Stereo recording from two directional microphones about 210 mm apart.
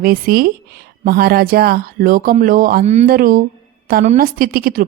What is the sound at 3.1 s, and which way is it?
A woman's voice, 45° right (ahead or behind).